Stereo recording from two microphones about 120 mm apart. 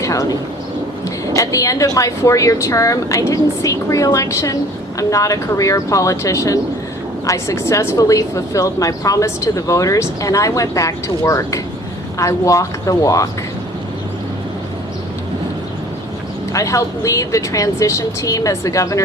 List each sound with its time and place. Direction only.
0.0 s a woman's voice: 30° left (ahead or behind)
16.5 s a woman's voice: 25° left (ahead or behind)